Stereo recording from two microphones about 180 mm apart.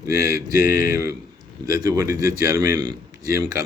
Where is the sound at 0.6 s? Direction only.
55° left (ahead or behind).